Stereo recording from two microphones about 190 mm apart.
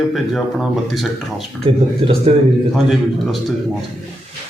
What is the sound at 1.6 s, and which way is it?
Speech, 30° right (ahead or behind).